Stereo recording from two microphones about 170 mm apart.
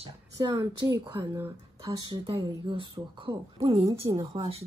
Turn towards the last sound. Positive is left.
turn(degrees=-30)  # may be behind; listen again after turning